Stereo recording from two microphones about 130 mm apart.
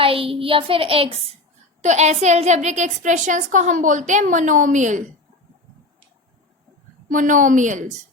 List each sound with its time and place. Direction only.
0.0 s child singing: 45° right (ahead or behind)
1.8 s a woman's voice: 60° right (ahead or behind)
7.1 s a woman's voice: 80° right